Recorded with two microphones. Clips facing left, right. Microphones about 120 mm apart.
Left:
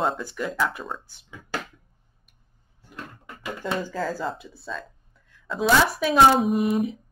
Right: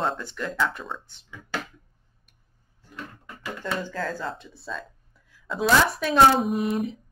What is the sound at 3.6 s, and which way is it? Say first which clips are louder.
Speech: left 2 dB; 10° left (ahead or behind).